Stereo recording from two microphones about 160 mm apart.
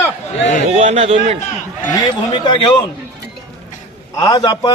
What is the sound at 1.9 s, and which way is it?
A man's voice, 30° left (ahead or behind).